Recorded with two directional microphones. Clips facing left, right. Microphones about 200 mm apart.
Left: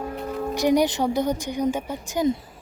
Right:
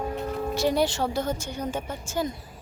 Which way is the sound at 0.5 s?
15° left (ahead or behind).